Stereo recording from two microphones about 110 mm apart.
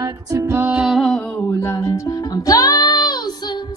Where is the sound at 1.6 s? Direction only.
25° left (ahead or behind).